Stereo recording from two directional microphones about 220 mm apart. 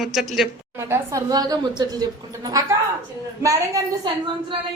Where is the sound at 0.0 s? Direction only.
Centre (ahead or behind).